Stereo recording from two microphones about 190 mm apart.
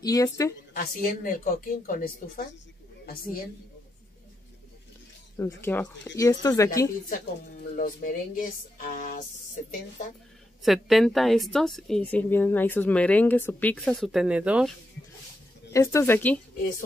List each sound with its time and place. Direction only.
0.0 s speech: 20° left (ahead or behind)
0.7 s speech: 45° left (ahead or behind)
5.4 s speech: 10° left (ahead or behind)
7.7 s speech: 45° left (ahead or behind)
8.9 s music: 45° left (ahead or behind)
10.6 s a woman's voice: centre (ahead or behind)
15.7 s speech: 15° left (ahead or behind)